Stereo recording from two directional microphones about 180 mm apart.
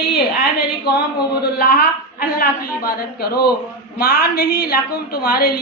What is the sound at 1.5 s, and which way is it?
A woman's voice, 55° left (ahead or behind).